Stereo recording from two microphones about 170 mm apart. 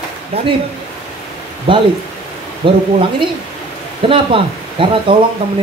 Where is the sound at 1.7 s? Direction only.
30° right (ahead or behind).